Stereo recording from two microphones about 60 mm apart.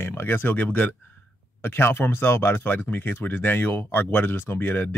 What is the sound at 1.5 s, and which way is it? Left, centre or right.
Speech, left.